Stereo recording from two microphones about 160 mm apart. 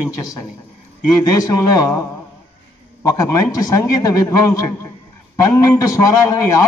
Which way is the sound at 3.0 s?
20° left (ahead or behind).